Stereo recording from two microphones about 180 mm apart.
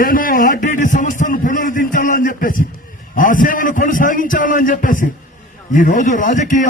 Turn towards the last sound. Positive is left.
turn(degrees=45)  # may be behind; listen again after turning